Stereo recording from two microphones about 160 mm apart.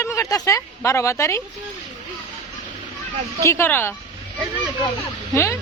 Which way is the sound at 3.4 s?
15° left (ahead or behind).